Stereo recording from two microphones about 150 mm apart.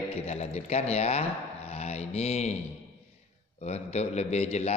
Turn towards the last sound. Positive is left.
turn(degrees=45)  # may be behind; listen again after turning